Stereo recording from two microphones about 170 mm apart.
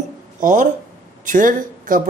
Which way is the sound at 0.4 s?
50° right (ahead or behind).